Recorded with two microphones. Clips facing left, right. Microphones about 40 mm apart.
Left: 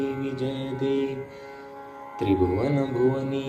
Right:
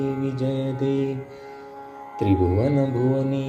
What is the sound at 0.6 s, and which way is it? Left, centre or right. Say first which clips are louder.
Music: left 1 dB; centre.